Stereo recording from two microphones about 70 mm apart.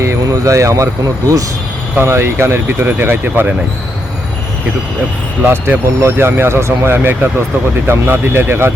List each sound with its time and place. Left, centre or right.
0.0 s speech: right
2.0 s speech: right
5.5 s speech: right